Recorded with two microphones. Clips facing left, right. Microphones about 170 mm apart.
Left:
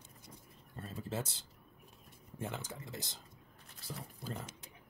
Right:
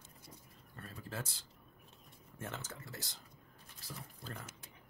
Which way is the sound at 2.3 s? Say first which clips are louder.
Left 4 dB; 15° left (ahead or behind).